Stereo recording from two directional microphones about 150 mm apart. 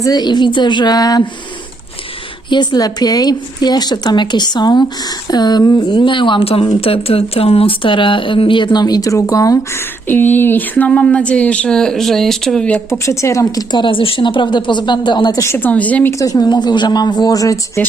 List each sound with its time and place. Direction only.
0.0 s a woman's voice: 25° left (ahead or behind)
2.5 s a woman's voice: 30° left (ahead or behind)
10.1 s speech: 10° left (ahead or behind)
16.1 s a woman's voice: 20° left (ahead or behind)